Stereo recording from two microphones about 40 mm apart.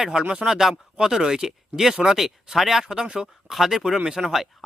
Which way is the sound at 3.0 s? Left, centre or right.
Right.